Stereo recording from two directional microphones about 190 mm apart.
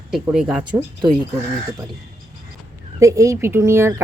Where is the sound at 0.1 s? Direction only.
5° right (ahead or behind).